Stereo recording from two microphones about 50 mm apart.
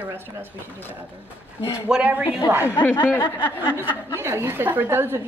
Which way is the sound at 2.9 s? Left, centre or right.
Left.